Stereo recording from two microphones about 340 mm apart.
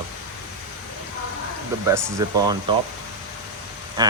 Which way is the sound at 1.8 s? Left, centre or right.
Centre.